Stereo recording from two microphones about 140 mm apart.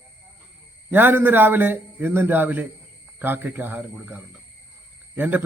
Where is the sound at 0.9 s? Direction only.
15° right (ahead or behind).